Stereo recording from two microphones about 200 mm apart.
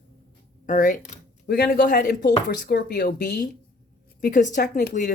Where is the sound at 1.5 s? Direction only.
55° left (ahead or behind).